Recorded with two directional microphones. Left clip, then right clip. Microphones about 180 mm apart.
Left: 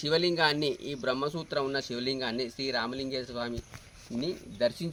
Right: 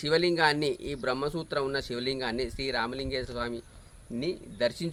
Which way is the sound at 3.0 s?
45° right (ahead or behind).